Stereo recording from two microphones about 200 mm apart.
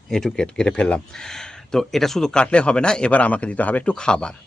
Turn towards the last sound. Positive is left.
turn(degrees=5)  # may be behind; listen again after turning